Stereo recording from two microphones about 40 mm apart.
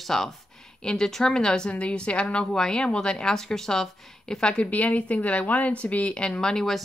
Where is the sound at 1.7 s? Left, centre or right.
Left.